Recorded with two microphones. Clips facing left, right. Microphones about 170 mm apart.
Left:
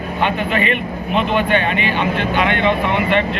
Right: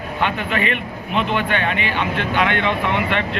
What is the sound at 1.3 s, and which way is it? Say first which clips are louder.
Speech: left 4 dB; 15° left (ahead or behind).